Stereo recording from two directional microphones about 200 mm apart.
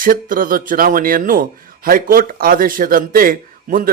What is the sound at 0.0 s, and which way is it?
Speech, 45° right (ahead or behind).